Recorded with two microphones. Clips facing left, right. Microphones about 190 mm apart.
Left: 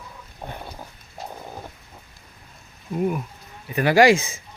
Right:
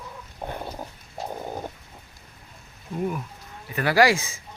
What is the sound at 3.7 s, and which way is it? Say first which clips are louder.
Speech: left 4 dB; 20° left (ahead or behind).